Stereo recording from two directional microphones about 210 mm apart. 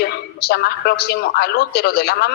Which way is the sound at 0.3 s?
50° left (ahead or behind).